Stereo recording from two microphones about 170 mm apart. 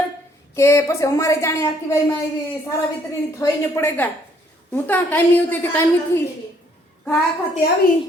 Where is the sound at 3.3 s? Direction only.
15° left (ahead or behind).